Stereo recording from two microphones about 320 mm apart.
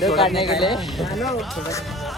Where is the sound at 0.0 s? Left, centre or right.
Centre.